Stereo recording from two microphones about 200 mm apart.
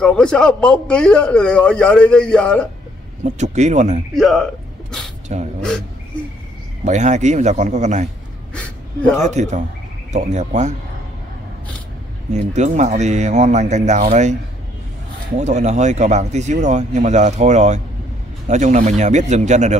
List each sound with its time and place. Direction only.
0.0 s a man's voice: 5° left (ahead or behind)
3.3 s speech: 35° right (ahead or behind)
4.1 s a man's voice: centre (ahead or behind)
5.3 s speech: 35° right (ahead or behind)
6.8 s speech: 35° right (ahead or behind)
9.2 s speech: 35° right (ahead or behind)
12.3 s speech: 35° right (ahead or behind)
15.3 s speech: 35° right (ahead or behind)